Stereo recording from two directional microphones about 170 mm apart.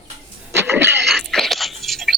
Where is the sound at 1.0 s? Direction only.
Centre (ahead or behind).